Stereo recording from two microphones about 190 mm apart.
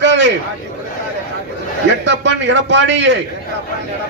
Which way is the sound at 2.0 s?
70° right (ahead or behind).